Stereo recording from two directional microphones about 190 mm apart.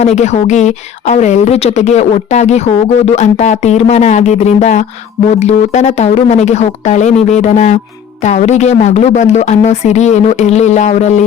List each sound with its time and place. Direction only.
0.0 s a woman's voice: 35° left (ahead or behind)